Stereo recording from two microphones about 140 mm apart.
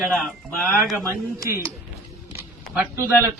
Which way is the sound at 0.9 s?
20° right (ahead or behind).